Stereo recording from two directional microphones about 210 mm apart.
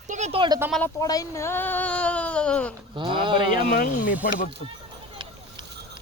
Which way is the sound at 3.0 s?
25° right (ahead or behind).